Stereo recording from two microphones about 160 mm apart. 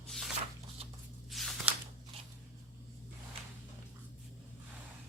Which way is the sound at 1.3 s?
Centre (ahead or behind).